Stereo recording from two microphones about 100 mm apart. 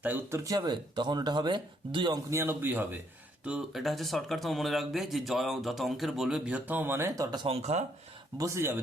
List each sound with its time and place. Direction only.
0.0 s a man's voice: 25° right (ahead or behind)
0.5 s speech: 50° right (ahead or behind)
2.1 s a man's voice: 25° right (ahead or behind)
3.7 s speech: centre (ahead or behind)
6.7 s a man's voice: 20° right (ahead or behind)
7.4 s speech: 80° right
8.4 s a man's voice: 25° right (ahead or behind)